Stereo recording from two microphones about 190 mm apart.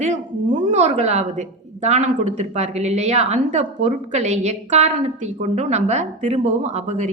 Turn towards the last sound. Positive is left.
turn(degrees=-35)  # may be behind; listen again after turning